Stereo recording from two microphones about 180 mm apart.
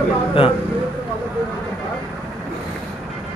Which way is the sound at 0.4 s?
30° left (ahead or behind).